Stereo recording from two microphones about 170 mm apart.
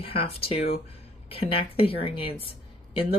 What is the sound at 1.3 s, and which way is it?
Speech, 35° left (ahead or behind).